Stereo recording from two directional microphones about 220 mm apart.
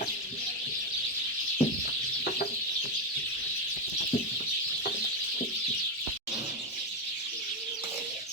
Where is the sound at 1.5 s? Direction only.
40° left (ahead or behind).